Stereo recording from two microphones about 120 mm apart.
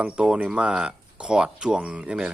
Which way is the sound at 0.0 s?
10° right (ahead or behind).